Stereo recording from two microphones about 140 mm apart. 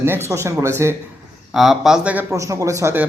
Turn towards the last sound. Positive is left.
turn(degrees=-15)  # may be behind; listen again after turning